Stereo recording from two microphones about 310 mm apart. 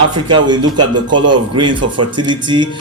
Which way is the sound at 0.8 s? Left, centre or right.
Right.